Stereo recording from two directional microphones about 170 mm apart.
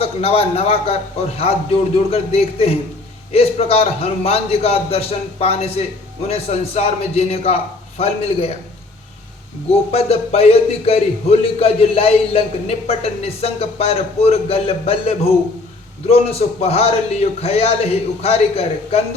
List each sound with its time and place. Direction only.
0.0 s speech: 35° left (ahead or behind)
9.9 s speech: 35° left (ahead or behind)